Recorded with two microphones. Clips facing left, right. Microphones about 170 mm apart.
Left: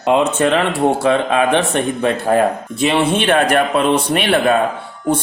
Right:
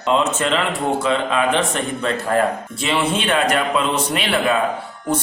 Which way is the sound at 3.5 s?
60° left (ahead or behind).